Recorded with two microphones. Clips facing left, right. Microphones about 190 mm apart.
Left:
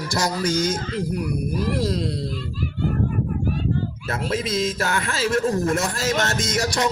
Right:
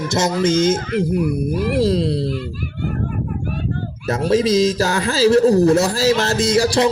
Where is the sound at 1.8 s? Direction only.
30° right (ahead or behind).